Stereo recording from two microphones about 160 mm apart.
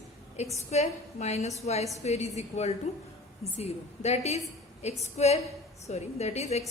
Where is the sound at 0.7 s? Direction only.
45° left (ahead or behind).